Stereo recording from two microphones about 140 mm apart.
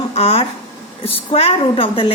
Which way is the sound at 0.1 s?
50° left (ahead or behind).